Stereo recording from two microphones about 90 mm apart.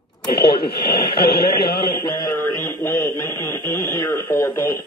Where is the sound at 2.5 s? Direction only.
35° left (ahead or behind).